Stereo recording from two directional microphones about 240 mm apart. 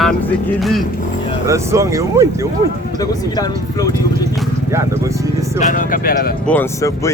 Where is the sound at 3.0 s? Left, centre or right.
Centre.